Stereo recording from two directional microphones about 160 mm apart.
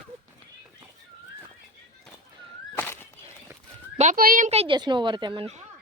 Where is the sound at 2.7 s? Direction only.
15° left (ahead or behind).